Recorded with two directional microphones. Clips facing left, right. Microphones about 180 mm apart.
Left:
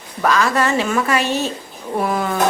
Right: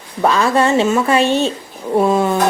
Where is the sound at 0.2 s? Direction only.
30° right (ahead or behind).